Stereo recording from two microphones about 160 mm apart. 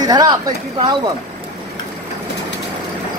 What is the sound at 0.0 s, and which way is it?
Speech, 25° right (ahead or behind).